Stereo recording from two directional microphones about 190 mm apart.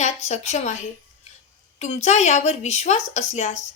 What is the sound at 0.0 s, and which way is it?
Speech, 35° left (ahead or behind).